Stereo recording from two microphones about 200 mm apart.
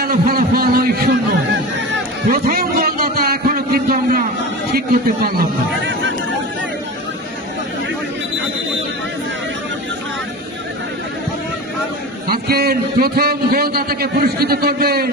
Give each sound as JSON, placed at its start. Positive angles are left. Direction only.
{"t": 0.0, "sound": "a man's voice", "side_deg": -50}
{"t": 2.3, "sound": "a sound", "side_deg": -45}
{"t": 12.3, "sound": "a man's voice", "side_deg": -50}